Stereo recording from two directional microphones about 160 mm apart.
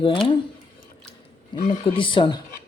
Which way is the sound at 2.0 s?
30° left (ahead or behind).